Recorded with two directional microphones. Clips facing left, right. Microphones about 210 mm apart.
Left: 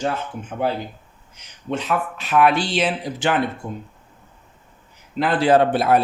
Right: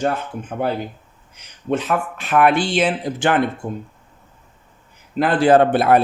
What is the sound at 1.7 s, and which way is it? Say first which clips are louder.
Speech: right 3 dB; 50° right (ahead or behind).